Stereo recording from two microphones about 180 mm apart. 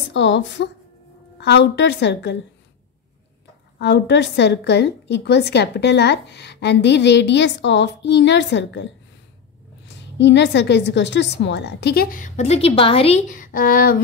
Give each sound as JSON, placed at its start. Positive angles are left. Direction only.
{"t": 0.1, "sound": "a woman's voice", "side_deg": 90}
{"t": 1.4, "sound": "a woman's voice", "side_deg": 75}
{"t": 3.7, "sound": "a woman's voice", "side_deg": 70}
{"t": 10.1, "sound": "a woman's voice", "side_deg": 75}
{"t": 13.3, "sound": "speech", "side_deg": 50}